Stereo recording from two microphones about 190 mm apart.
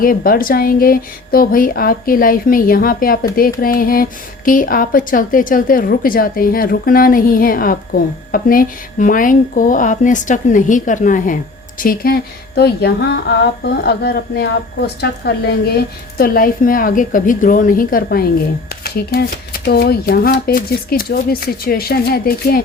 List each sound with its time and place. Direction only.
0.0 s a woman's voice: 50° left (ahead or behind)